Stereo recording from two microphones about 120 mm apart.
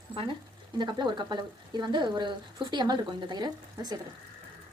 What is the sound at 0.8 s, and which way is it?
Speech, 40° right (ahead or behind).